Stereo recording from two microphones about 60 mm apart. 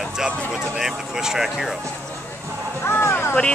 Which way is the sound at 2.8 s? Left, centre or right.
Left.